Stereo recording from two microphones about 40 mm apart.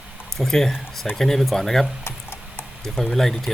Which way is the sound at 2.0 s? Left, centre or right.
Left.